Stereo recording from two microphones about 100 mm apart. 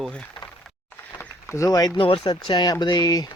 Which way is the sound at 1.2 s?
25° left (ahead or behind).